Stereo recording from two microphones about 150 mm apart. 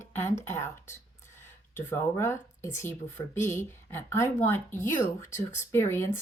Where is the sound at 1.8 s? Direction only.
15° left (ahead or behind).